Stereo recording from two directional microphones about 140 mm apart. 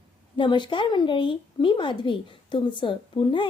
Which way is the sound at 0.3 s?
35° left (ahead or behind).